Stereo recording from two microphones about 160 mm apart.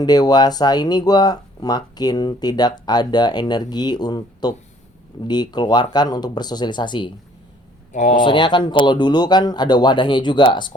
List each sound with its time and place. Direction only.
0.0 s speech: 25° left (ahead or behind)
7.9 s speech: 55° left (ahead or behind)
8.2 s speech: 30° left (ahead or behind)